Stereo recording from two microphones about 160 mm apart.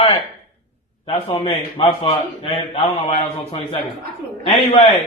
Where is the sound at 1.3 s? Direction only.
40° left (ahead or behind).